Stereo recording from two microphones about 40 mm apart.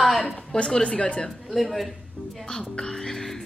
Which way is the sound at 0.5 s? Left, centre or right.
Left.